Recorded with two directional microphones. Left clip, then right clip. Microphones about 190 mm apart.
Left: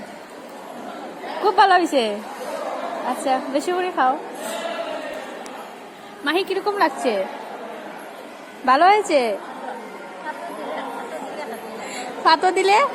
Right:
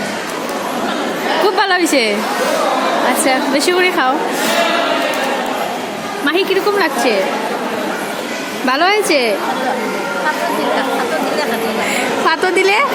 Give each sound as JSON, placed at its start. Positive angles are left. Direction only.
{"t": 1.5, "sound": "a woman's voice", "side_deg": 15}
{"t": 3.2, "sound": "speech", "side_deg": 10}
{"t": 6.2, "sound": "a woman's voice", "side_deg": 25}
{"t": 8.6, "sound": "a woman's voice", "side_deg": 20}
{"t": 12.2, "sound": "a woman's voice", "side_deg": 20}